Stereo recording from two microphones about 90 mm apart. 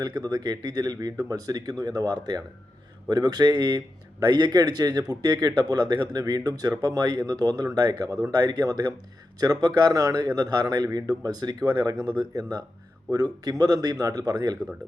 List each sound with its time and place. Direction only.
0.0 s speech: 50° right (ahead or behind)